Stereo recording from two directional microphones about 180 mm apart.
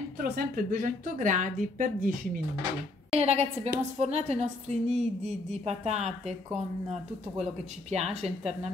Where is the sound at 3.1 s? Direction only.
35° right (ahead or behind).